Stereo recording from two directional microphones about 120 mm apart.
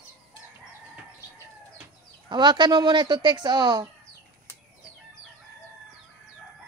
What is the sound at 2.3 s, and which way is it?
Speech, 40° right (ahead or behind).